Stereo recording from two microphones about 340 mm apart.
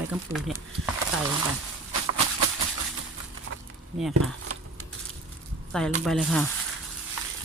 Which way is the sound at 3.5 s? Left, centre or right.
Right.